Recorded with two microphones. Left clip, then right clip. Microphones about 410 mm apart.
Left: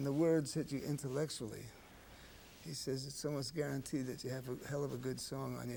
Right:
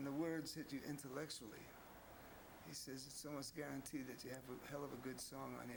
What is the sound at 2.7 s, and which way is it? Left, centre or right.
Speech, left.